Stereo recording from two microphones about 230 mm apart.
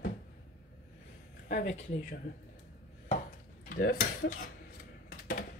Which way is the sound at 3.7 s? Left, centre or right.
Left.